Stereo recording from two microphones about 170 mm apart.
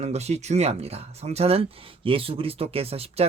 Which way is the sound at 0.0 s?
40° right (ahead or behind).